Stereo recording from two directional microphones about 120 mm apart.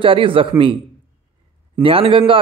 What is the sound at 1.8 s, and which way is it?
Speech, 50° right (ahead or behind).